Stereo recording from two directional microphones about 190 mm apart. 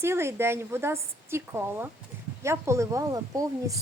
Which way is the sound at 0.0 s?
15° right (ahead or behind).